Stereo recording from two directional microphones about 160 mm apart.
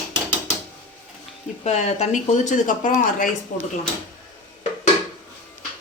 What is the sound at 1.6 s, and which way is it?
A woman's voice, 45° left (ahead or behind).